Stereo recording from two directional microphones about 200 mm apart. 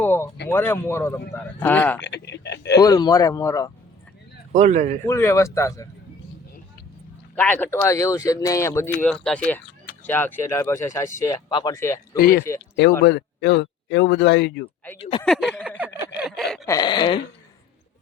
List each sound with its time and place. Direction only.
0.0 s a sound: 10° left (ahead or behind)
0.4 s speech: 10° left (ahead or behind)
2.0 s a sound: 60° left (ahead or behind)
2.8 s speech: 20° left (ahead or behind)
4.5 s a man's voice: 35° right (ahead or behind)
5.0 s speech: 15° left (ahead or behind)
7.3 s speech: 10° left (ahead or behind)
9.0 s speech: centre (ahead or behind)
12.1 s speech: 45° left (ahead or behind)
13.0 s speech: 60° left (ahead or behind)
15.2 s a sound: centre (ahead or behind)
16.6 s a sound: 20° left (ahead or behind)